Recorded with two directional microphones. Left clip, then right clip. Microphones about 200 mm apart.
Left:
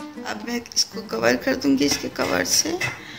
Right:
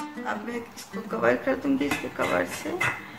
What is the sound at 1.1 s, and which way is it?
Speech, 55° left (ahead or behind).